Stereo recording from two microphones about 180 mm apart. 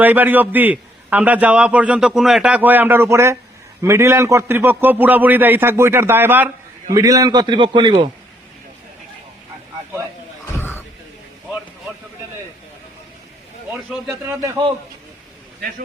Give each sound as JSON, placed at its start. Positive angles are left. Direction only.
{"t": 0.0, "sound": "a man's voice", "side_deg": -10}
{"t": 10.6, "sound": "a sound", "side_deg": 10}
{"t": 14.3, "sound": "a man's voice", "side_deg": -15}